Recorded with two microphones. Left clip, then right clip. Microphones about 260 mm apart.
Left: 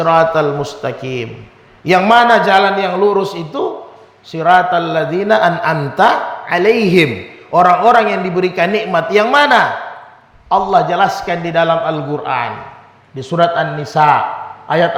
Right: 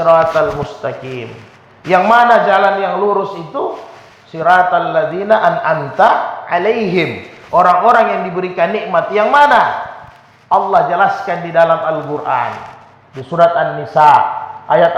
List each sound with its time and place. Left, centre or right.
0.0 s a man's voice: left